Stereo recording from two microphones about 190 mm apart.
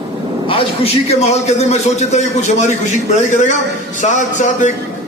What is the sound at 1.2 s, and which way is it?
A man's voice, 35° left (ahead or behind).